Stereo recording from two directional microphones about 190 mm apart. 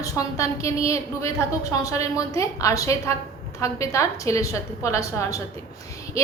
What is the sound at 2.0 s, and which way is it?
A woman's voice, 15° left (ahead or behind).